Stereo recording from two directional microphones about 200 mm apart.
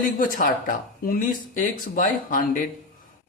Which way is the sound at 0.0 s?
45° left (ahead or behind).